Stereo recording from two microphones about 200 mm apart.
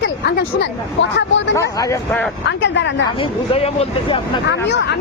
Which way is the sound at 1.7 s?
15° left (ahead or behind).